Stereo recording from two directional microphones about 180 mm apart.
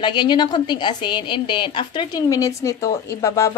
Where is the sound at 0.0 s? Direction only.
25° left (ahead or behind).